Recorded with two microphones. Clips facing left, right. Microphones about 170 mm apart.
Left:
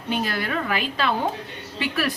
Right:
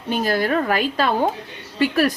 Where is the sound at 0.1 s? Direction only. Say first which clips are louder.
Right 6 dB; 40° right (ahead or behind).